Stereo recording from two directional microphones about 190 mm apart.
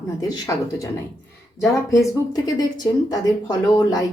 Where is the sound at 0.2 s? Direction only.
15° left (ahead or behind).